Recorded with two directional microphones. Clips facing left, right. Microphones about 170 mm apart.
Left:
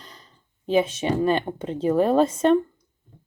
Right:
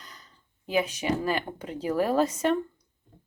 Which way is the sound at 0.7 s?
25° left (ahead or behind).